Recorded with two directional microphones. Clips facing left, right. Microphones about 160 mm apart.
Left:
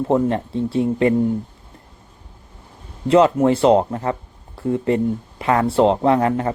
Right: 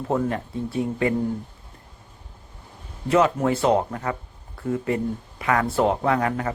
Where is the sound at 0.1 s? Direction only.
30° left (ahead or behind).